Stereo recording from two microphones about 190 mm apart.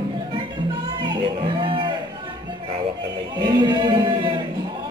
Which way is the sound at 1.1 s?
25° right (ahead or behind).